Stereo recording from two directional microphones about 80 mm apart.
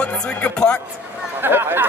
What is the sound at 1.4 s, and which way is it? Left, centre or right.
Speech, right.